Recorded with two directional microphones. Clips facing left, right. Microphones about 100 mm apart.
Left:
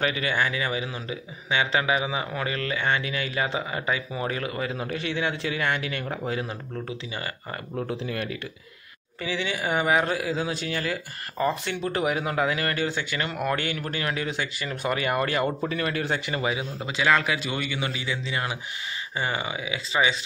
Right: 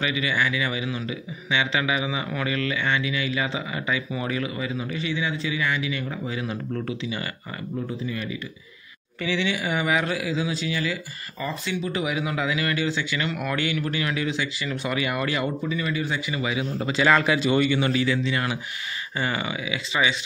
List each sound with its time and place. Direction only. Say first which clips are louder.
0.0 s speech: even; 45° left (ahead or behind)
6.4 s speech: right 4 dB; 30° left (ahead or behind)
7.9 s speech: even; 70° left (ahead or behind)
9.2 s speech: right 3 dB; 35° left (ahead or behind)
15.7 s speech: even; 65° left (ahead or behind)
16.7 s a man's voice: right 6 dB; 10° left (ahead or behind)
17.0 s speech: right 3 dB; centre (ahead or behind)
18.0 s a man's voice: right 5 dB; 20° left (ahead or behind)